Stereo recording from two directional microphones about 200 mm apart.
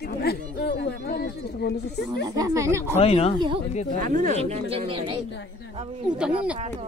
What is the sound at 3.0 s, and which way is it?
Speech, 30° left (ahead or behind).